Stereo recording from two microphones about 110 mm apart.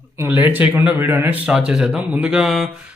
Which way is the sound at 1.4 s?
5° right (ahead or behind).